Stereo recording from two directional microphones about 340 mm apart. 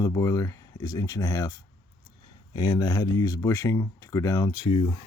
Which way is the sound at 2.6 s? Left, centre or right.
Centre.